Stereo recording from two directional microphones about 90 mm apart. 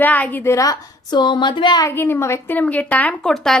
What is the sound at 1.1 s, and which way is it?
Speech, 55° left (ahead or behind).